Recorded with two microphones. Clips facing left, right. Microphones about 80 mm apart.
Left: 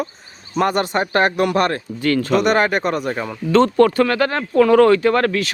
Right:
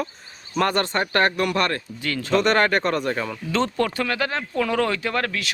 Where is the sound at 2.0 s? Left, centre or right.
Left.